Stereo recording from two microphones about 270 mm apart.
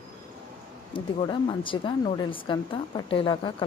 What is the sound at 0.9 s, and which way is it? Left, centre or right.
Speech, centre.